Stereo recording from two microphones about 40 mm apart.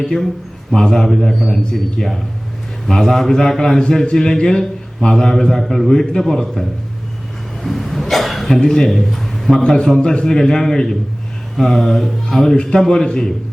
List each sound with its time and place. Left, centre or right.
0.7 s a man's voice: centre
9.6 s a man's voice: centre